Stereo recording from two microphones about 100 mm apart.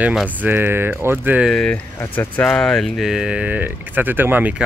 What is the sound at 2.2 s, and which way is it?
Speech, 20° left (ahead or behind).